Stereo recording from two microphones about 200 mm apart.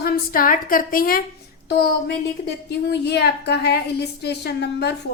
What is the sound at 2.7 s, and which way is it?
A woman's voice, 55° left (ahead or behind).